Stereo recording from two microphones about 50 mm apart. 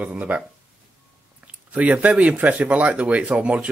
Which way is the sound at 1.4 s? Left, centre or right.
Right.